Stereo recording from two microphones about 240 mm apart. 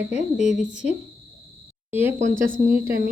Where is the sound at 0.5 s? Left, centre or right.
Centre.